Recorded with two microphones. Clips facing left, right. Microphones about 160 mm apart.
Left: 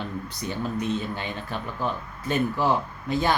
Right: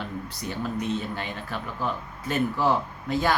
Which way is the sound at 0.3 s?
20° left (ahead or behind).